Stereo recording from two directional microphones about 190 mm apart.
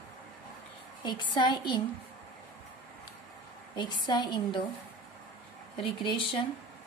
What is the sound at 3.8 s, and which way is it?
Speech, 20° left (ahead or behind).